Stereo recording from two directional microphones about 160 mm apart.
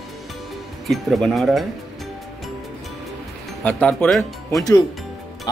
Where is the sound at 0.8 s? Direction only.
Centre (ahead or behind).